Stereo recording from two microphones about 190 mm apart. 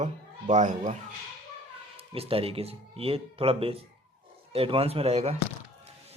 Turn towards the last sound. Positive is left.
turn(degrees=-35)  # may be behind; listen again after turning